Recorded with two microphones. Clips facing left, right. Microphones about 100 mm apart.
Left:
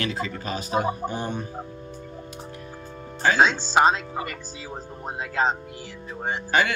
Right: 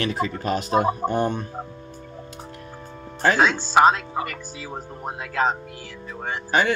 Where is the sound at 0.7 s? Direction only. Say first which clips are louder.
Right 3 dB; 70° right (ahead or behind).